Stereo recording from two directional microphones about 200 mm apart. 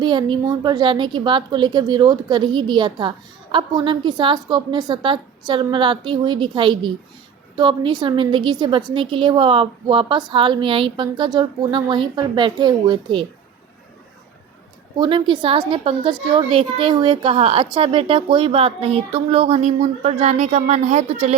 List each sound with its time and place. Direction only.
0.0 s a woman's voice: 25° right (ahead or behind)
14.9 s a woman's voice: 20° right (ahead or behind)